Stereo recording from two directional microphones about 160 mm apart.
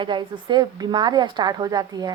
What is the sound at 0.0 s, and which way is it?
A woman's voice, 30° right (ahead or behind).